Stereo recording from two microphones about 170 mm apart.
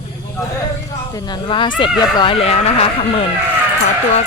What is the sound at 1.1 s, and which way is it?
Speech, 25° left (ahead or behind).